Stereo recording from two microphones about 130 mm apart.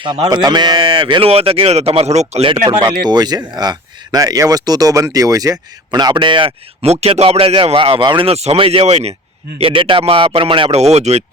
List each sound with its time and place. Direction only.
0.3 s speech: 30° right (ahead or behind); by 2.5 s 55° right (ahead or behind)
2.5 s speech: 35° right (ahead or behind)
6.8 s speech: 55° right (ahead or behind)
10.8 s speech: 55° right (ahead or behind)